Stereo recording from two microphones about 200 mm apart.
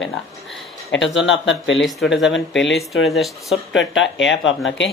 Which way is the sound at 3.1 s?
Centre (ahead or behind).